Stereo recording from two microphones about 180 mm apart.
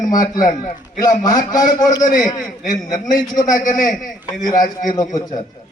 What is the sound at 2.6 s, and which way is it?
A man's voice, 45° left (ahead or behind).